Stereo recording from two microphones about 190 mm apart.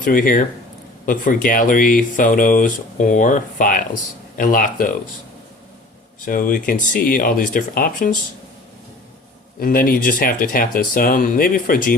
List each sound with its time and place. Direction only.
0.0 s speech: 45° left (ahead or behind)
6.2 s speech: 45° left (ahead or behind)
9.6 s speech: 50° left (ahead or behind)